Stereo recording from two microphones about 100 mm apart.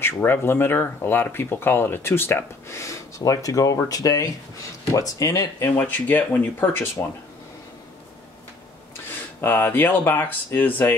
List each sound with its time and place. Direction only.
0.0 s speech: 20° left (ahead or behind)
5.7 s speech: 20° left (ahead or behind)
9.4 s speech: 20° left (ahead or behind)